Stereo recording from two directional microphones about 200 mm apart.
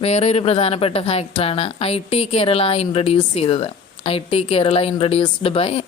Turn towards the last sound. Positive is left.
turn(degrees=30)  # may be behind; listen again after turning